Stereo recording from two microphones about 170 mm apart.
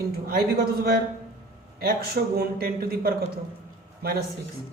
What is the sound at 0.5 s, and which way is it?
A woman's voice, 65° right (ahead or behind).